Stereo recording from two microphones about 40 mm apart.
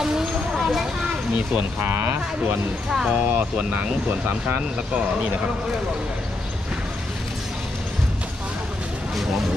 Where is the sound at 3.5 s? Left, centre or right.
Right.